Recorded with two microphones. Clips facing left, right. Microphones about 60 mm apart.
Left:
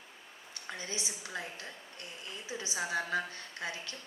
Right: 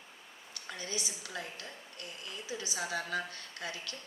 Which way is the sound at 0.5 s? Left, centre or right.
Left.